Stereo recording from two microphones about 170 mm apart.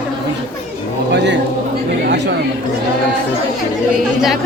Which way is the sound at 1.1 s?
90° right.